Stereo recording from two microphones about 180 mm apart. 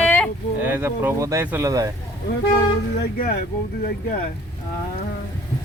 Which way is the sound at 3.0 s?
60° left (ahead or behind).